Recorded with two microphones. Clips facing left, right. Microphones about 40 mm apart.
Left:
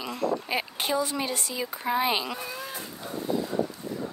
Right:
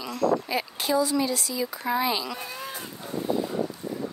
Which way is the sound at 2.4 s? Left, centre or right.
Centre.